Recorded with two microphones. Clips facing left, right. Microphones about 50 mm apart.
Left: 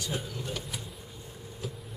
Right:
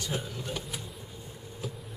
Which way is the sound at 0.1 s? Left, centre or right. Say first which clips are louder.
Right 1 dB; centre.